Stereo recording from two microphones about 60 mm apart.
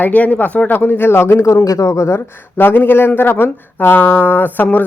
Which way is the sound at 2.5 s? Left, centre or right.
Left.